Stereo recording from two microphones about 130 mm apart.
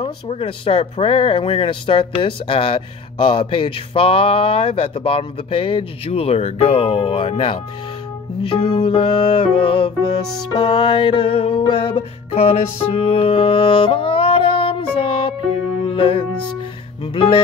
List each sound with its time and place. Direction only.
0.0 s speech: 45° left (ahead or behind)
8.5 s music: 40° left (ahead or behind)
17.0 s speech: 40° left (ahead or behind)